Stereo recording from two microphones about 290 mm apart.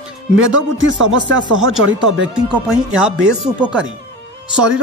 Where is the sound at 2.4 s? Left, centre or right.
Centre.